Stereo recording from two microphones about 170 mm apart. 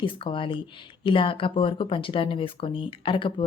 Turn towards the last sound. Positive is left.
turn(degrees=30)  # may be behind; listen again after turning